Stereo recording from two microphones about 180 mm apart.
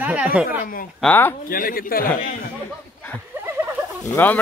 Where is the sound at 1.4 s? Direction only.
55° left (ahead or behind).